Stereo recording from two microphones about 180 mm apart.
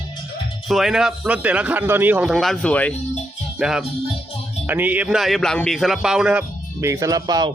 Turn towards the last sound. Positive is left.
turn(degrees=-20)  # may be behind; listen again after turning